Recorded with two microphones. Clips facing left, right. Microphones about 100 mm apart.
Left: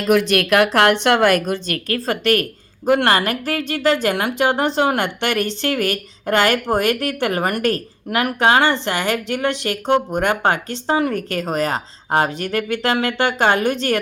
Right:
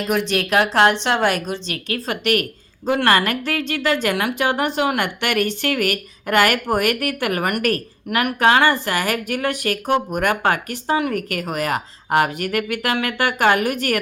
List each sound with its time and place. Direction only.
0.1 s speech: 65° left (ahead or behind)
2.0 s a woman's voice: 35° left (ahead or behind)
4.4 s speech: 25° left (ahead or behind)